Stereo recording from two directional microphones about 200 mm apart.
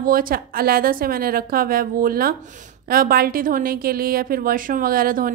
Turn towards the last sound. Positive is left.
turn(degrees=-45)  # may be behind; listen again after turning